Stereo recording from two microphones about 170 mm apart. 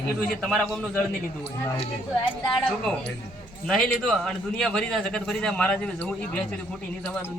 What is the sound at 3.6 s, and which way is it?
A man's voice, 5° left (ahead or behind).